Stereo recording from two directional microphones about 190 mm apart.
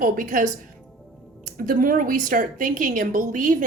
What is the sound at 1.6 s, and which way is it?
Speech, 45° right (ahead or behind).